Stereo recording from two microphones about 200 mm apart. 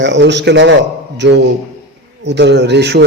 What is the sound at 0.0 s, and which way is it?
Speech, 60° right (ahead or behind).